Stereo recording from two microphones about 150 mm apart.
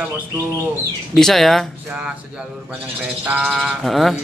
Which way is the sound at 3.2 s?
5° right (ahead or behind).